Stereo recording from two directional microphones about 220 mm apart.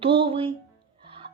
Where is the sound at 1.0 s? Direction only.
25° right (ahead or behind).